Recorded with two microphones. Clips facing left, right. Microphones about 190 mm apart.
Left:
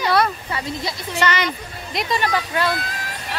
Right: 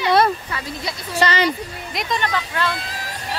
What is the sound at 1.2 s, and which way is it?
Speech, 35° right (ahead or behind).